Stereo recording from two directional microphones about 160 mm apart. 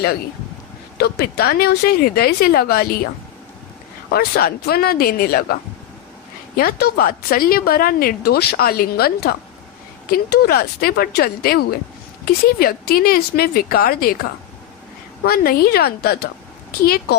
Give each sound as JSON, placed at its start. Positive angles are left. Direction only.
{"t": 0.9, "sound": "a woman's voice", "side_deg": 80}
{"t": 4.1, "sound": "a woman's voice", "side_deg": 75}
{"t": 6.6, "sound": "a woman's voice", "side_deg": 75}
{"t": 15.2, "sound": "a woman's voice", "side_deg": 75}